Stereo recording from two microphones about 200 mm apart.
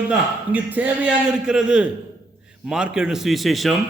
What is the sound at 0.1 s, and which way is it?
A man's voice, 5° right (ahead or behind).